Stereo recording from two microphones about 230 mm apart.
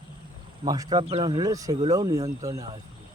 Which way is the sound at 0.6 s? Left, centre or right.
Centre.